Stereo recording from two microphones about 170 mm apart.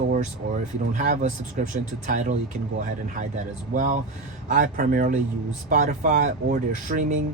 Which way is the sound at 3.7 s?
50° right (ahead or behind).